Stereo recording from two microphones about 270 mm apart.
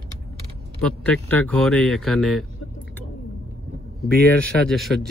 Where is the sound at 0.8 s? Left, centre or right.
Centre.